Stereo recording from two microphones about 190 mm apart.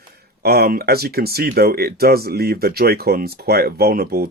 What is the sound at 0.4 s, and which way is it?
Speech, 55° right (ahead or behind).